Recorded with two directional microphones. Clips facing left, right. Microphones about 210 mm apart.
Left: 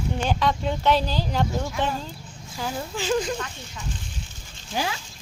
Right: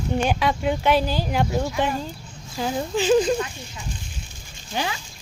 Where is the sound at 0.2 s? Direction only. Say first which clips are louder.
Right 1 dB; 10° right (ahead or behind).